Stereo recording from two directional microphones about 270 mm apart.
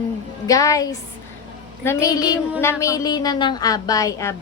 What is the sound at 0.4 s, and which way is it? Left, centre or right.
A woman's voice, centre.